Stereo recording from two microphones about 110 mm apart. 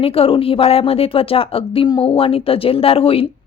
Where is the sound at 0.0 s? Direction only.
60° left (ahead or behind).